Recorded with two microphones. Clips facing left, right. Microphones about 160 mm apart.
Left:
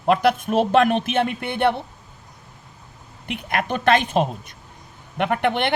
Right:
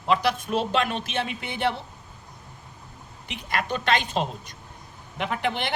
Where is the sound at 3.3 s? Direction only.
55° left (ahead or behind).